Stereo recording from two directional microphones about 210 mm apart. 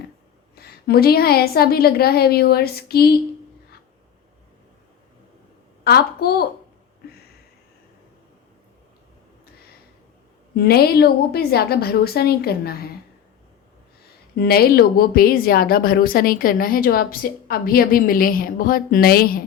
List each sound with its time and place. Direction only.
0.5 s a woman's voice: 45° left (ahead or behind)
5.8 s a woman's voice: 50° left (ahead or behind)
10.5 s a woman's voice: 50° left (ahead or behind)
14.3 s a woman's voice: 45° left (ahead or behind)